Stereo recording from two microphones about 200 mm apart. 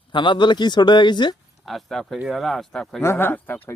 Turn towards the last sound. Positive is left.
turn(degrees=10)  # may be behind; listen again after turning